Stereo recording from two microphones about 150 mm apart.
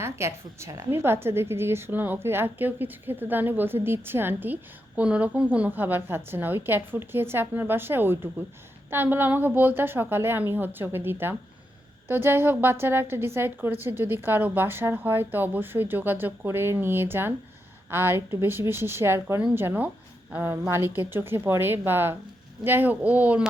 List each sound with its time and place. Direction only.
0.0 s a woman's voice: 20° right (ahead or behind)